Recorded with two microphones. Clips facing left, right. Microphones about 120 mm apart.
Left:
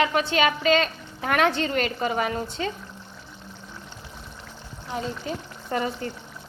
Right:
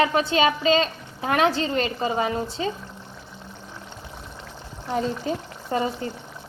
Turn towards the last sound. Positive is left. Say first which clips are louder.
# right 2 dB
turn(degrees=-25)  # may be behind; listen again after turning